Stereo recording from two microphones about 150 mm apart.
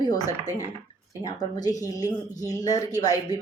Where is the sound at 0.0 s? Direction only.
25° left (ahead or behind).